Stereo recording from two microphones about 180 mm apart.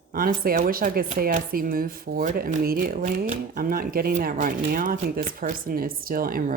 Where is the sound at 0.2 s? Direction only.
50° right (ahead or behind).